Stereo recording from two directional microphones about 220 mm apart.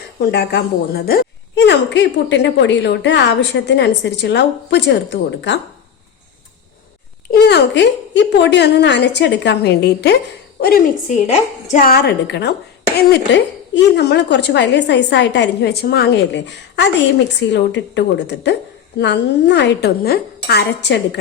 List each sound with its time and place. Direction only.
0.2 s a woman's voice: 50° left (ahead or behind)
7.3 s a woman's voice: 45° left (ahead or behind)
11.3 s a woman's voice: 35° left (ahead or behind)